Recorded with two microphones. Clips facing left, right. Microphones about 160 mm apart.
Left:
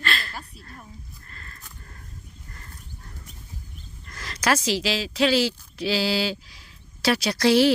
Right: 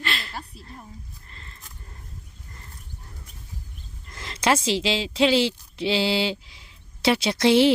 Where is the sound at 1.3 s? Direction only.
20° right (ahead or behind).